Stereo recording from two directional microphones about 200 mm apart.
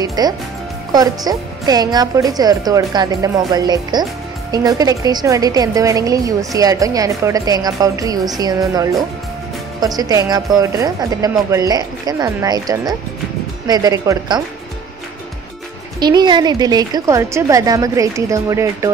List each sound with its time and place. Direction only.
0.0 s a woman's voice: 20° right (ahead or behind)
16.0 s a woman's voice: 20° right (ahead or behind)